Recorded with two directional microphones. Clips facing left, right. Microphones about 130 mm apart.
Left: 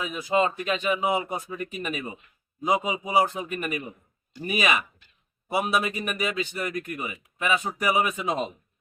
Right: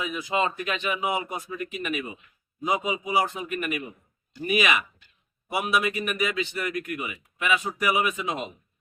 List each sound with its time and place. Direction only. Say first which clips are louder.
0.0 s a man's voice: left 2 dB; 35° left (ahead or behind)